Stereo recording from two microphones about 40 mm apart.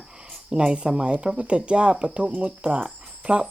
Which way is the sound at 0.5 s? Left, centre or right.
Right.